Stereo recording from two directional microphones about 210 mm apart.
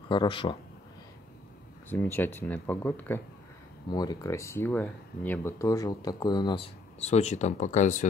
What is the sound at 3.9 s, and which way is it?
Speech, 20° left (ahead or behind).